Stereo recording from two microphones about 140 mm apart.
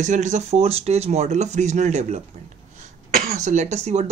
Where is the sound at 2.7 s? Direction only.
75° right (ahead or behind); by 4.0 s 55° right (ahead or behind).